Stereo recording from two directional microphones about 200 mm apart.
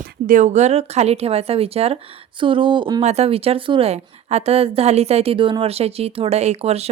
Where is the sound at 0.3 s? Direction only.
35° right (ahead or behind).